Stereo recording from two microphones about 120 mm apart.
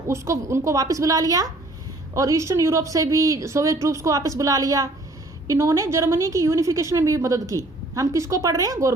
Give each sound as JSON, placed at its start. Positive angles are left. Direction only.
{"t": 0.1, "sound": "a woman's voice", "side_deg": -25}